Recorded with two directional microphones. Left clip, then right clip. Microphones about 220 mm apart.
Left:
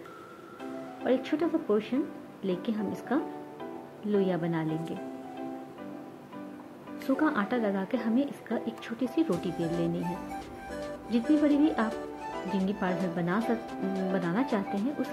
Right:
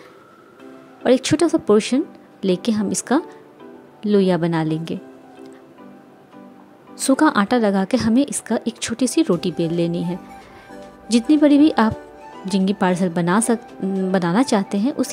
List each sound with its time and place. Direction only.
1.0 s a woman's voice: 55° right (ahead or behind)
7.1 s a woman's voice: 55° right (ahead or behind)
10.0 s music: centre (ahead or behind)
11.1 s a woman's voice: 55° right (ahead or behind)
12.2 s music: centre (ahead or behind)
12.5 s a woman's voice: 55° right (ahead or behind)